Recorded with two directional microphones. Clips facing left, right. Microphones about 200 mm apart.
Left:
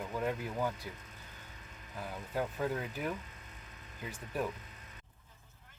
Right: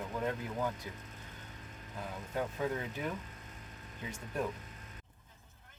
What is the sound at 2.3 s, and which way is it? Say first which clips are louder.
Speech: left 1 dB; 5° left (ahead or behind).